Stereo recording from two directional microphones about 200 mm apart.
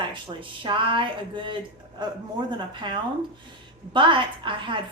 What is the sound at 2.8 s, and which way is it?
A woman's voice, 25° right (ahead or behind).